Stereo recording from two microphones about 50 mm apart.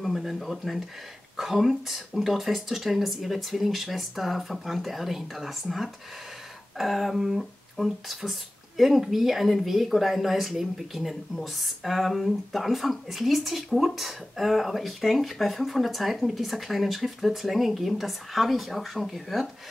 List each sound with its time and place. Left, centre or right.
0.0 s speech: centre